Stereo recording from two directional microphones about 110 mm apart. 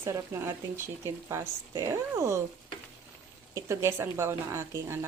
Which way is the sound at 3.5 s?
25° right (ahead or behind).